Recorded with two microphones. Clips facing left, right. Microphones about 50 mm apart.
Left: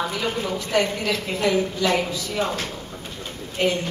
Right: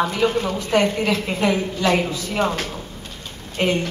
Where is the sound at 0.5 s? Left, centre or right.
Right.